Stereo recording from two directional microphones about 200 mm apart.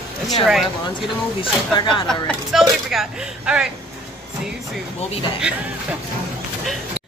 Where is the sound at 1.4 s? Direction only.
25° left (ahead or behind).